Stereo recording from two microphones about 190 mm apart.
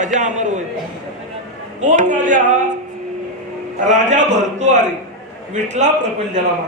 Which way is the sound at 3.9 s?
40° right (ahead or behind).